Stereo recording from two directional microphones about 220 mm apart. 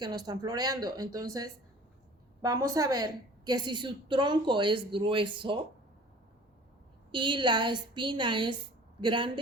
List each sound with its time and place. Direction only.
0.0 s a woman's voice: 20° right (ahead or behind)
7.1 s a woman's voice: 20° right (ahead or behind)